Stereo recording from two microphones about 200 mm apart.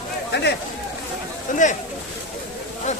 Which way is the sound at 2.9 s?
35° left (ahead or behind).